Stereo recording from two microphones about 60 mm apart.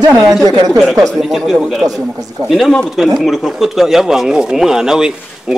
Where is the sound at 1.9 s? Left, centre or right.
Right.